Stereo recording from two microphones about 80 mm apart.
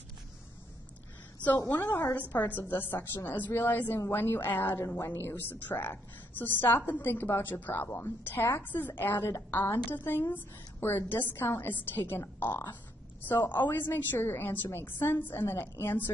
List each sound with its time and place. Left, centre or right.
1.7 s a woman's voice: left
2.1 s a woman's voice: left